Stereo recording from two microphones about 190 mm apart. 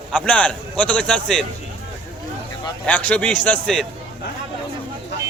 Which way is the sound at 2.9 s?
10° left (ahead or behind).